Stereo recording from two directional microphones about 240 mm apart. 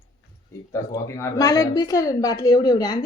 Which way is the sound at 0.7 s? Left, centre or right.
Centre.